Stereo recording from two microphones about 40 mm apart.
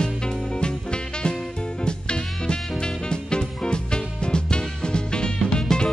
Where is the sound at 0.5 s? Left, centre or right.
Left.